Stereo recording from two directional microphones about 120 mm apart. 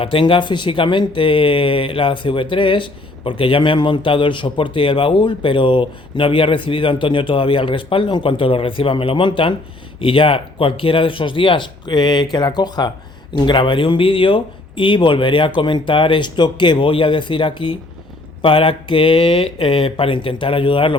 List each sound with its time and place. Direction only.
0.0 s speech: 45° left (ahead or behind)